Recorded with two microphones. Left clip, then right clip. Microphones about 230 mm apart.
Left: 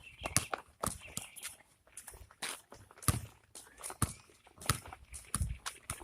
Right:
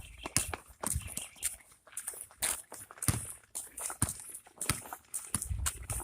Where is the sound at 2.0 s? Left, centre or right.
Right.